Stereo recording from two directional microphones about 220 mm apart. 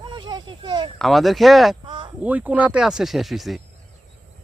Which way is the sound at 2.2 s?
5° right (ahead or behind).